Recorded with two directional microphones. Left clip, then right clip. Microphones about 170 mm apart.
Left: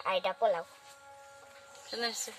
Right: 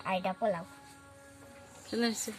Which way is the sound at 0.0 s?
60° left (ahead or behind).